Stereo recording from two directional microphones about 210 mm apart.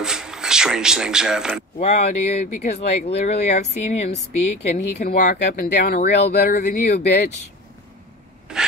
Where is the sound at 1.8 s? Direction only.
30° left (ahead or behind).